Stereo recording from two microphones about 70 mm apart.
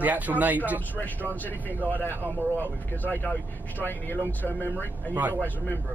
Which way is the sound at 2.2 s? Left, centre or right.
Right.